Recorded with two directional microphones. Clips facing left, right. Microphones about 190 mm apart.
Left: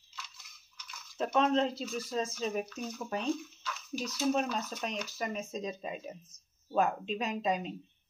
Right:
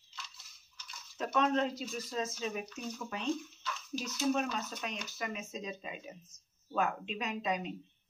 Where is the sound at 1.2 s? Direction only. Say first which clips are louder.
Left 3 dB; 30° left (ahead or behind).